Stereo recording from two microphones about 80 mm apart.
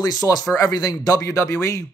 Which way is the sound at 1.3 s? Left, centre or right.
Left.